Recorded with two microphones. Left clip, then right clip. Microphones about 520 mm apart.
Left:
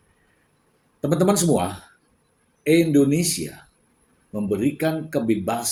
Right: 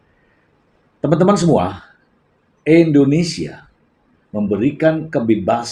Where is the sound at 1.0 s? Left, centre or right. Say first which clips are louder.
Right 6 dB; left.